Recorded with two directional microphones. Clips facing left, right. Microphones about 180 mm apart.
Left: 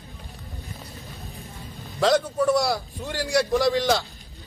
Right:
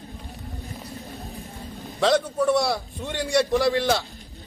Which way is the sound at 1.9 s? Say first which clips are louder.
Even; centre (ahead or behind).